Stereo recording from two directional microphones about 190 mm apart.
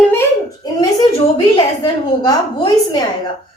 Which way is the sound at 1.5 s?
20° left (ahead or behind).